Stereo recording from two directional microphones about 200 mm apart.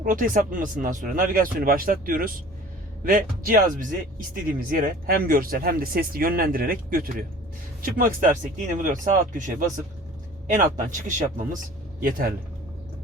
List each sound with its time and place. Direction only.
0.0 s speech: 40° right (ahead or behind)